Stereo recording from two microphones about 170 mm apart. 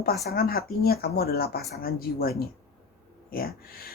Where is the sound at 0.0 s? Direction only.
65° left (ahead or behind).